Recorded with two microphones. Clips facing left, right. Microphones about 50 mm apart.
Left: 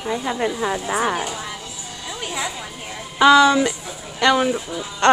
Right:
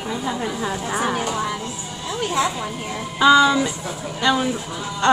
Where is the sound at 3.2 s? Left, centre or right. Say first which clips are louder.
Left 2 dB; left.